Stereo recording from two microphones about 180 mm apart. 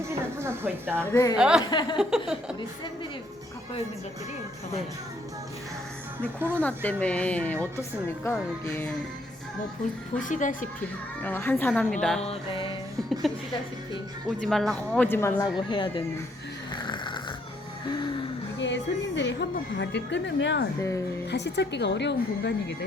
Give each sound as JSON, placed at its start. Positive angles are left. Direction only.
{"t": 0.0, "sound": "music", "side_deg": -15}
{"t": 1.1, "sound": "speech", "side_deg": 20}
{"t": 1.4, "sound": "a sound", "side_deg": -5}
{"t": 6.5, "sound": "a woman's voice", "side_deg": 10}
{"t": 10.2, "sound": "speech", "side_deg": 45}
{"t": 11.2, "sound": "a woman's voice", "side_deg": 10}
{"t": 12.2, "sound": "music", "side_deg": 30}
{"t": 13.3, "sound": "a sound", "side_deg": 0}
{"t": 14.4, "sound": "a woman's voice", "side_deg": 0}
{"t": 15.5, "sound": "speech", "side_deg": 25}
{"t": 16.7, "sound": "snoring", "side_deg": 25}
{"t": 18.6, "sound": "a woman's voice", "side_deg": 85}